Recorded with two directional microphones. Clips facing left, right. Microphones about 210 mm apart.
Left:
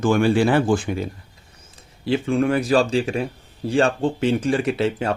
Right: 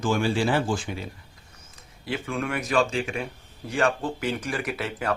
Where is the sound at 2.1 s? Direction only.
30° left (ahead or behind).